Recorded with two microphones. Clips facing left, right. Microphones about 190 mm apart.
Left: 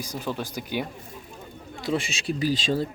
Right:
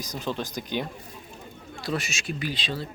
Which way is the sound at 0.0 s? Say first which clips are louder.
Even; 10° left (ahead or behind).